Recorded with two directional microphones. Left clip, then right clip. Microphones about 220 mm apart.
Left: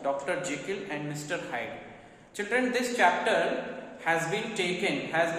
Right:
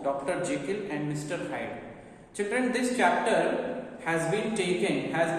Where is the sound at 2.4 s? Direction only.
15° left (ahead or behind).